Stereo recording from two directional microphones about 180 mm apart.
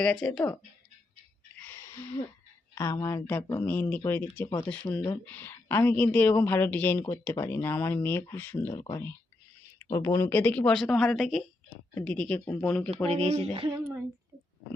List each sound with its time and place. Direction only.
0.0 s speech: 5° left (ahead or behind)
1.5 s a sound: 10° left (ahead or behind)
2.7 s speech: 15° left (ahead or behind)
13.1 s speech: 35° right (ahead or behind)